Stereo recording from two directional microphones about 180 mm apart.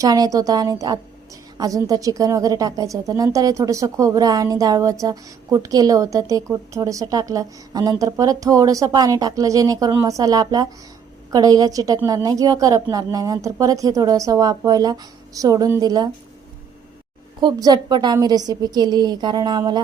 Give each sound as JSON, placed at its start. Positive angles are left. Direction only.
{"t": 0.0, "sound": "speech", "side_deg": -20}
{"t": 17.4, "sound": "speech", "side_deg": -25}